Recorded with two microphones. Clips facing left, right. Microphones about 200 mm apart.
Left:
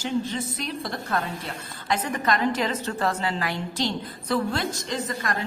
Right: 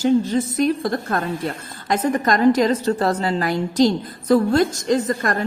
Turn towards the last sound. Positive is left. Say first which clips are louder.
# right 8 dB
turn(degrees=-50)  # may be behind; listen again after turning